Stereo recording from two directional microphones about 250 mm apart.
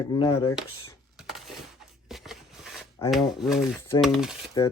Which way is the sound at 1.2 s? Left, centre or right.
Centre.